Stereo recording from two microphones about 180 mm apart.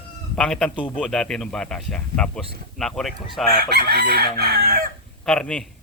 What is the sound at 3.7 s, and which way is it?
Chicken, 60° right (ahead or behind).